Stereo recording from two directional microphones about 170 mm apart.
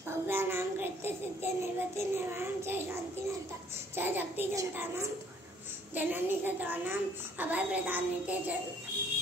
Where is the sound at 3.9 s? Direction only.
10° right (ahead or behind).